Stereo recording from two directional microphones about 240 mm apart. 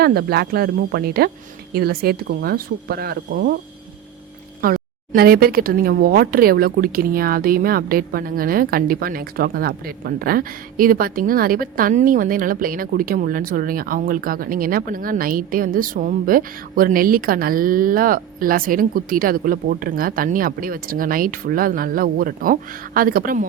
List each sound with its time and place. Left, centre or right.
0.0 s speech: right
4.6 s speech: right